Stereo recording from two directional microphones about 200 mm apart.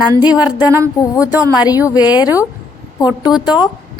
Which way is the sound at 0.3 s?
5° right (ahead or behind).